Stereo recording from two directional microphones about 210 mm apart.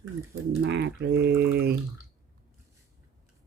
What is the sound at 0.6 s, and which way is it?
Speech, 55° right (ahead or behind).